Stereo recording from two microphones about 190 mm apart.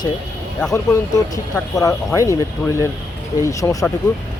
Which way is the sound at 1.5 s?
20° left (ahead or behind).